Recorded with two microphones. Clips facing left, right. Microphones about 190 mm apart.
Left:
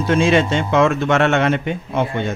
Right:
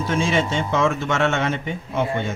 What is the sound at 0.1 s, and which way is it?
A man's voice, 70° left (ahead or behind).